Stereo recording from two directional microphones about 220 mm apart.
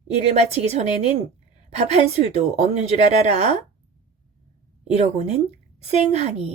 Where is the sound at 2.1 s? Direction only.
30° right (ahead or behind).